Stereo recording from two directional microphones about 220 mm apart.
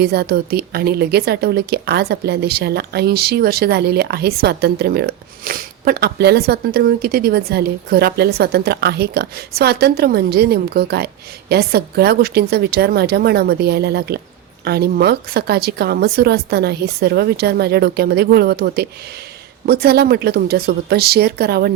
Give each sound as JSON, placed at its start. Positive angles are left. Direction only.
{"t": 0.0, "sound": "a woman's voice", "side_deg": -45}